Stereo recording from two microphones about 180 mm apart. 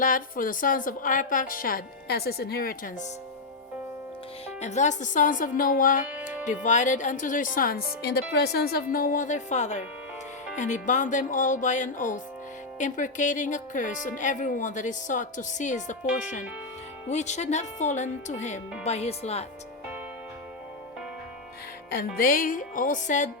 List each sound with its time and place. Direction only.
0.0 s speech: 50° left (ahead or behind)
4.6 s speech: 40° left (ahead or behind)
21.8 s speech: 55° left (ahead or behind)